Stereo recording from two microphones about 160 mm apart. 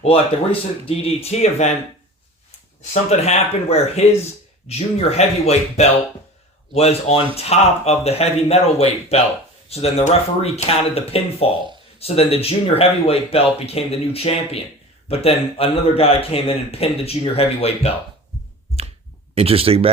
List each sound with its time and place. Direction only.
0.0 s a man's voice: 35° left (ahead or behind)
2.9 s a man's voice: 45° left (ahead or behind)
19.3 s speech: 35° right (ahead or behind)